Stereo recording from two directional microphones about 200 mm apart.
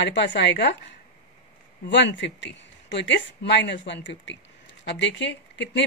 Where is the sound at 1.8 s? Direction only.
65° left (ahead or behind).